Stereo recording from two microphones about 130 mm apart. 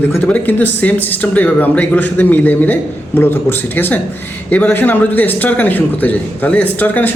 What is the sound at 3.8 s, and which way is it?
A man's voice, 15° left (ahead or behind).